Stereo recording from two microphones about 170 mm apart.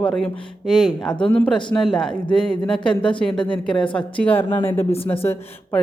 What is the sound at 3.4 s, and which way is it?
Speech, 5° left (ahead or behind).